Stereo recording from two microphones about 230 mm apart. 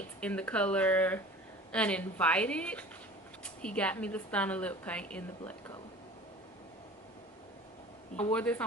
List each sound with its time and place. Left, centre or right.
0.2 s a woman's voice: centre
8.2 s a woman's voice: centre